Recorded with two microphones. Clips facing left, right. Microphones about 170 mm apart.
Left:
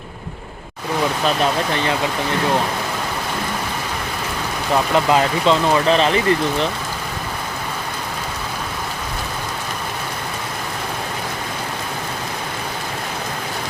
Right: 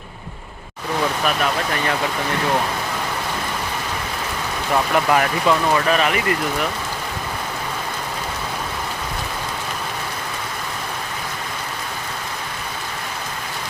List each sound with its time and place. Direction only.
1.2 s speech: 25° left (ahead or behind)
4.7 s speech: 20° left (ahead or behind)